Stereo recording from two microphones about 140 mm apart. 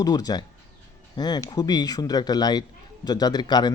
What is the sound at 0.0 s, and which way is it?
Speech, 30° left (ahead or behind).